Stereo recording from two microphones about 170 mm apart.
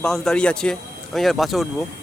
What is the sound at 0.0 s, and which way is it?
Speech, 5° left (ahead or behind).